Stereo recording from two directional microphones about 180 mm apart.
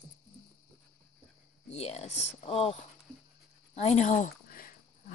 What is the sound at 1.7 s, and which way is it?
Speech, 35° left (ahead or behind).